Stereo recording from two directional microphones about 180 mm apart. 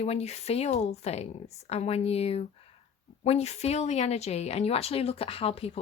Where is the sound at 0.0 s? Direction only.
35° left (ahead or behind).